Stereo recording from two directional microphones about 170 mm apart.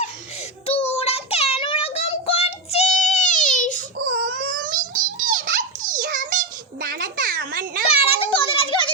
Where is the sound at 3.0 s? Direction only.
45° left (ahead or behind).